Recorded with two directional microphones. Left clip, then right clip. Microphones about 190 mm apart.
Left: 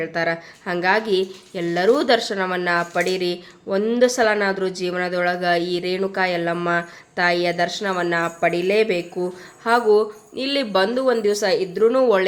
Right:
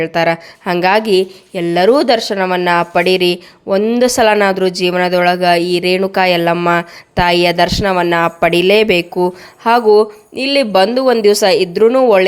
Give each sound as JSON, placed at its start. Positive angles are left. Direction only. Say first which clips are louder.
{"t": 0.0, "sound": "a woman's voice", "louder": "right 9 dB", "side_deg": -45}